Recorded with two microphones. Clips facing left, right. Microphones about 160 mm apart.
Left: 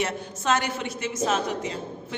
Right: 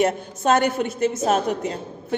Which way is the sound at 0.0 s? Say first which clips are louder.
Right 7 dB; 50° right (ahead or behind).